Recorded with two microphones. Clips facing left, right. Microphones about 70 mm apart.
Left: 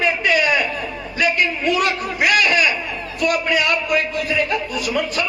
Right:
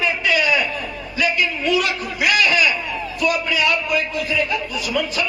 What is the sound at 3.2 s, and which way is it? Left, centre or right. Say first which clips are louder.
A man's voice: left 1 dB; left.